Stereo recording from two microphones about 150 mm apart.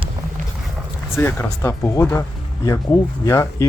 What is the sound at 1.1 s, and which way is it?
Speech, 15° left (ahead or behind).